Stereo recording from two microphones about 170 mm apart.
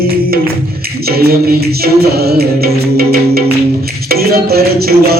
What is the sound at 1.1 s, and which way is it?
Music, 65° right (ahead or behind).